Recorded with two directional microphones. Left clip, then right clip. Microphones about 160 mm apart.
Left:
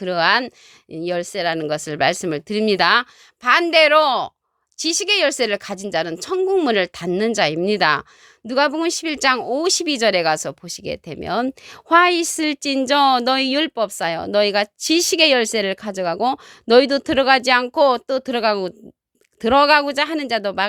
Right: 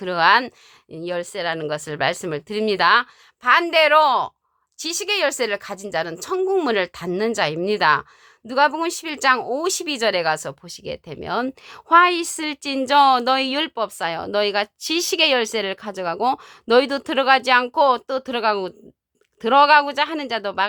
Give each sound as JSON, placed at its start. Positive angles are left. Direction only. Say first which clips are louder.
{"t": 0.0, "sound": "speech", "louder": "right 1 dB", "side_deg": 25}